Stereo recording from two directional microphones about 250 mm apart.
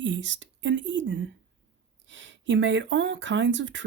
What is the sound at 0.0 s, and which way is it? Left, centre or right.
Speech, right.